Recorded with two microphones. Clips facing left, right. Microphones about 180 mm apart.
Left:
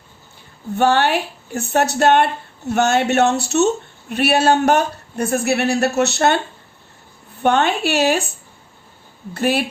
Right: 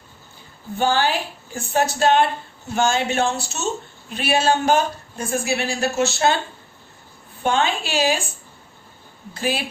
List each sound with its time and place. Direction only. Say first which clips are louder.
0.8 s speech: left 4 dB; 65° left (ahead or behind)
7.4 s speech: left 5 dB; 65° left (ahead or behind)
9.3 s speech: left 6 dB; 65° left (ahead or behind)